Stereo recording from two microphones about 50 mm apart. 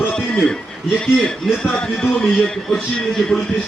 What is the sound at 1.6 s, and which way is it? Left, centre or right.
Speech, centre.